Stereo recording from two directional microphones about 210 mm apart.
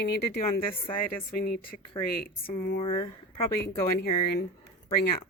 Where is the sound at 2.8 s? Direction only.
25° left (ahead or behind).